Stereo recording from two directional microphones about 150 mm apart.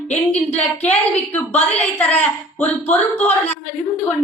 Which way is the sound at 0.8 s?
10° left (ahead or behind).